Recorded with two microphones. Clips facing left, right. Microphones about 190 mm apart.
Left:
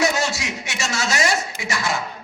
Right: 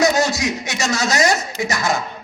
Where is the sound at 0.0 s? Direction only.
40° right (ahead or behind).